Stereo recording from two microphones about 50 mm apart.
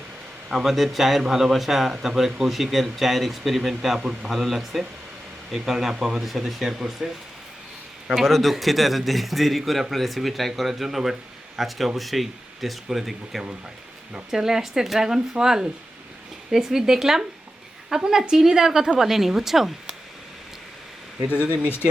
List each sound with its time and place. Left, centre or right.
0.4 s speech: centre
8.1 s speech: centre